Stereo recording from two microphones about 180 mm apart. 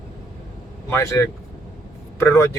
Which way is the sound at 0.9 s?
15° left (ahead or behind).